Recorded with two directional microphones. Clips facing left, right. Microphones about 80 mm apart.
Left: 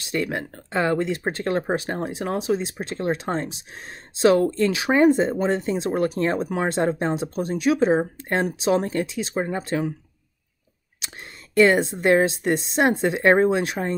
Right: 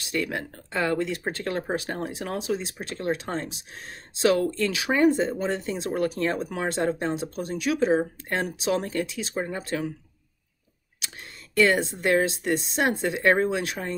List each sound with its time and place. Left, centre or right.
0.1 s speech: left
11.0 s speech: left